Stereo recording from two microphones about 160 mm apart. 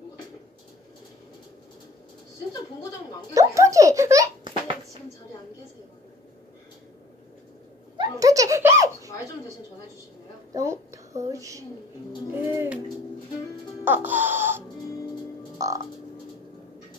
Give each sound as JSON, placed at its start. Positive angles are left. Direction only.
{"t": 3.3, "sound": "a child's voice", "side_deg": -20}
{"t": 8.0, "sound": "giggle", "side_deg": -20}
{"t": 10.5, "sound": "a woman's voice", "side_deg": -20}
{"t": 13.8, "sound": "music", "side_deg": -10}
{"t": 15.6, "sound": "music", "side_deg": -20}